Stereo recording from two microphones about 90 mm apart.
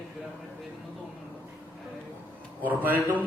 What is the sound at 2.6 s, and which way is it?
Speech, 20° right (ahead or behind).